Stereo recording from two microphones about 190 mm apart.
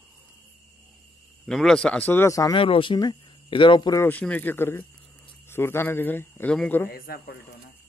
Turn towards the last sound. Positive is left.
turn(degrees=50)  # may be behind; listen again after turning